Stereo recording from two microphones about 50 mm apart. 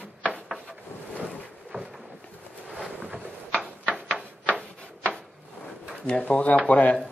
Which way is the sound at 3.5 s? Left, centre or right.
Left.